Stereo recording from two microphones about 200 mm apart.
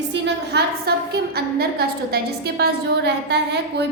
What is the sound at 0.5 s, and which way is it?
A woman's voice, 50° right (ahead or behind).